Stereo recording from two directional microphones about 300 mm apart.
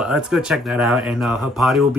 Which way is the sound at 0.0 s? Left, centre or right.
Centre.